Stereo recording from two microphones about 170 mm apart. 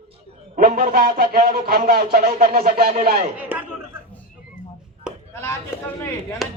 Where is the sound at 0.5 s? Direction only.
55° right (ahead or behind).